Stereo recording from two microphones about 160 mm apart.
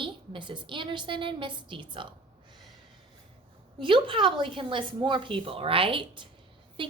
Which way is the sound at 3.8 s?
30° right (ahead or behind).